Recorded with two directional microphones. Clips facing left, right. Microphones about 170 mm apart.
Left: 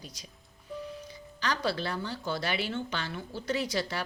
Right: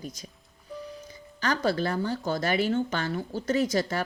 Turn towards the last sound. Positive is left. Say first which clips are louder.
# right 6 dB
turn(degrees=-45)  # may be behind; listen again after turning